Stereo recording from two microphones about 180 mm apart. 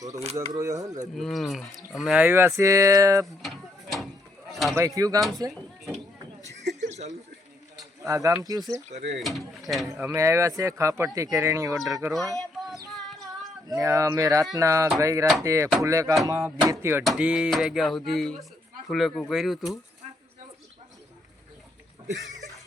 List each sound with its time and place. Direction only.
0.5 s speech: 20° right (ahead or behind)
1.1 s speech: centre (ahead or behind); by 3.2 s 20° right (ahead or behind)
4.9 s speech: 20° right (ahead or behind)
6.7 s a sound: 40° right (ahead or behind)
8.0 s speech: 15° right (ahead or behind)
9.1 s speech: centre (ahead or behind)
9.9 s speech: 15° right (ahead or behind)
12.4 s child singing: centre (ahead or behind)
13.7 s speech: 20° right (ahead or behind)
17.0 s speech: 5° right (ahead or behind)